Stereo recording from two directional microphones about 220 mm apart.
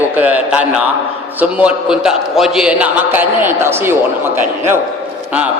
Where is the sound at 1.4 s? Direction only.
5° right (ahead or behind).